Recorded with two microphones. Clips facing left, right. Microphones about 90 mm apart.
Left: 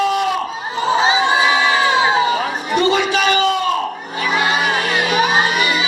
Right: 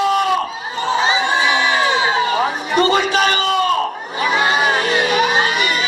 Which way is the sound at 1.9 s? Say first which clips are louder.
Left 2 dB; 10° left (ahead or behind).